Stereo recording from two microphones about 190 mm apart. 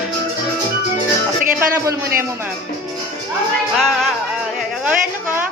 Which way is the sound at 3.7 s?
Centre (ahead or behind).